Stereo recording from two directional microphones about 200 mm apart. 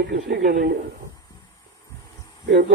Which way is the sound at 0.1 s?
55° right (ahead or behind).